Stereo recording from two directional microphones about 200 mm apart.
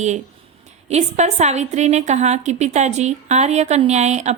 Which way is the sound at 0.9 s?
35° right (ahead or behind).